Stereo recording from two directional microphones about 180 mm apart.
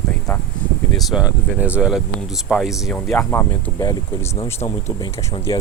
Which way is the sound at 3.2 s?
15° left (ahead or behind).